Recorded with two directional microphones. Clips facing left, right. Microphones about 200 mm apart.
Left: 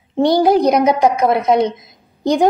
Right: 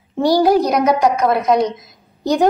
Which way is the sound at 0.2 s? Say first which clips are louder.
Left 1 dB; 20° left (ahead or behind).